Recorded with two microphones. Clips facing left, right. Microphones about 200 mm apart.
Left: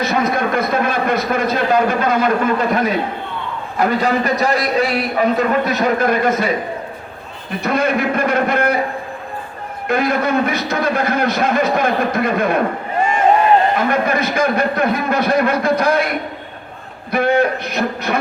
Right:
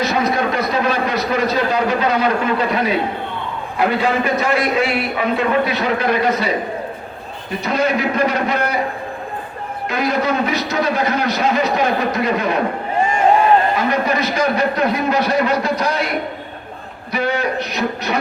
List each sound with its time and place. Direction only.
0.0 s a man's voice: 50° left (ahead or behind)
7.6 s a man's voice: 55° left (ahead or behind)
9.9 s a man's voice: 55° left (ahead or behind)
13.7 s a man's voice: 55° left (ahead or behind)
17.1 s a man's voice: 55° left (ahead or behind)